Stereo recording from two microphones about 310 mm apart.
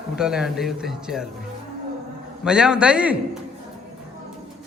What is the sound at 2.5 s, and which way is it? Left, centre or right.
Speech, centre.